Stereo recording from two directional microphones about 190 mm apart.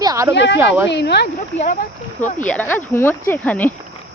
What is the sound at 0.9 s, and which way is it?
Speech, 65° left (ahead or behind).